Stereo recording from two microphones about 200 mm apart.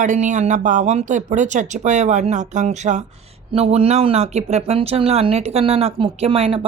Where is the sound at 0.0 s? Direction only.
40° right (ahead or behind).